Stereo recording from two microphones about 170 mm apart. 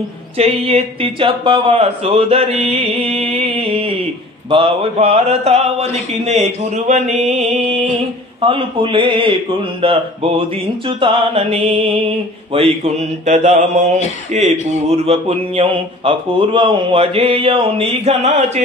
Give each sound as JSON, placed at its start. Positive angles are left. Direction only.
{"t": 0.4, "sound": "speech", "side_deg": -35}
{"t": 12.5, "sound": "mantra", "side_deg": -40}
{"t": 14.3, "sound": "speech", "side_deg": -40}